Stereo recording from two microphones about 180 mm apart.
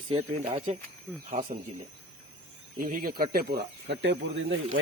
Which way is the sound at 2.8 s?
50° right (ahead or behind).